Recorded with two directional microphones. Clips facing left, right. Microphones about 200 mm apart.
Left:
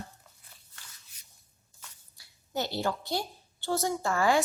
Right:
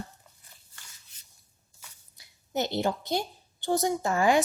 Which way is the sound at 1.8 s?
20° right (ahead or behind).